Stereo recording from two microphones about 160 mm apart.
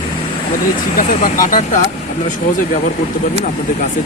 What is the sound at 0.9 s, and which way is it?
Speech, 55° left (ahead or behind).